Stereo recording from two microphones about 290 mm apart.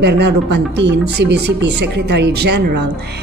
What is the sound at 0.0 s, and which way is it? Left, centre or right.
Speech, right.